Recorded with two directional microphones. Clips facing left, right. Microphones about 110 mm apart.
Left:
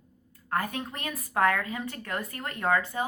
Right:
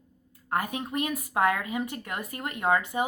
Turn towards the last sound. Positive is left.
turn(degrees=-20)  # may be behind; listen again after turning